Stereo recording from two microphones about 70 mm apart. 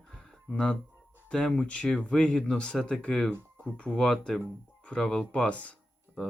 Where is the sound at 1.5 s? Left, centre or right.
Centre.